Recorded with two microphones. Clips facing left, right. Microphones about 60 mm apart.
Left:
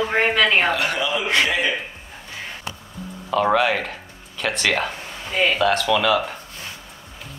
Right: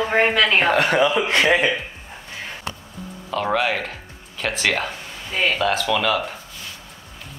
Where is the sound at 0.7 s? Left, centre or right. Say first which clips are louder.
Right 5 dB; right.